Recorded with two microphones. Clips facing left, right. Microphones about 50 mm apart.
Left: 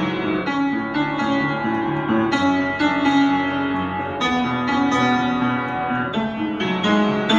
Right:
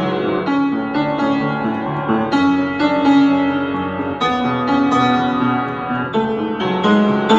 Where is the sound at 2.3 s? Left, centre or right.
Left.